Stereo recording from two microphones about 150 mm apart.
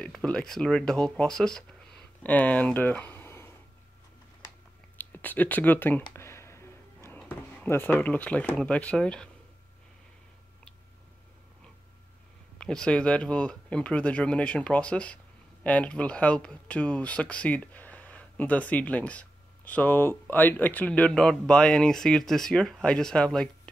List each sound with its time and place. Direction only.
0.0 s speech: 5° left (ahead or behind)
4.9 s speech: 10° left (ahead or behind)
6.1 s music: 15° left (ahead or behind)
7.2 s speech: 10° left (ahead or behind)
12.5 s speech: 5° left (ahead or behind)